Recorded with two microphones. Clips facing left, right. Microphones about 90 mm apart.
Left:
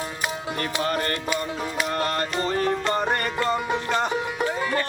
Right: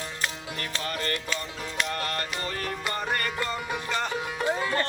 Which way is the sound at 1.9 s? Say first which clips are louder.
Left 7 dB; 30° left (ahead or behind).